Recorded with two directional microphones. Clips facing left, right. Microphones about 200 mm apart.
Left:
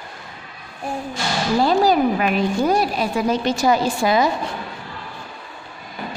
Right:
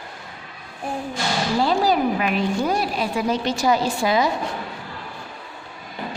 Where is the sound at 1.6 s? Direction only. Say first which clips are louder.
Left 4 dB; 45° left (ahead or behind).